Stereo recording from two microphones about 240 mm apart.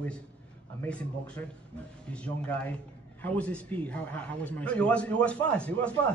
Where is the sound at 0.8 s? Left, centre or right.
Centre.